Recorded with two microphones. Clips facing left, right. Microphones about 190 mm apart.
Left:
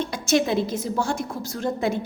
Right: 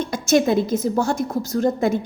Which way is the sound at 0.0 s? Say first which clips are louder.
Right 4 dB; 45° right (ahead or behind).